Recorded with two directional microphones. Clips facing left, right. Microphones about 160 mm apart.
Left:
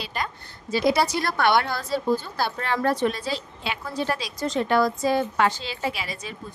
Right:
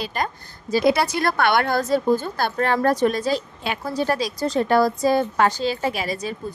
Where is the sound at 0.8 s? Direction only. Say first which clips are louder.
Right 2 dB; 55° right (ahead or behind).